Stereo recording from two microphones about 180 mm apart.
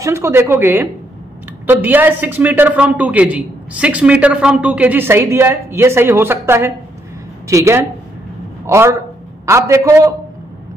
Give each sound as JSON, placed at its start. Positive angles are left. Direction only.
{"t": 0.0, "sound": "a man's voice", "side_deg": -15}